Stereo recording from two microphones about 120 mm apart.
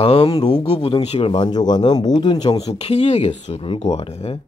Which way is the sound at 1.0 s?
60° left (ahead or behind).